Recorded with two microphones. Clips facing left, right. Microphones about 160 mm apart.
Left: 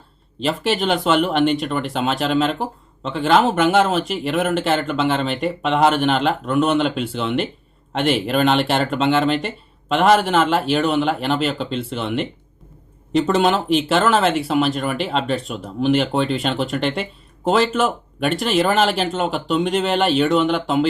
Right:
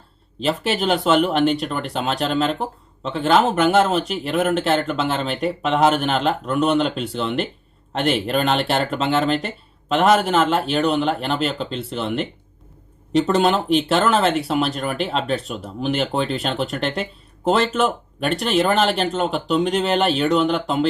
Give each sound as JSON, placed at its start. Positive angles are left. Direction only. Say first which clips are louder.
{"t": 0.3, "sound": "speech", "louder": "left 1 dB", "side_deg": 0}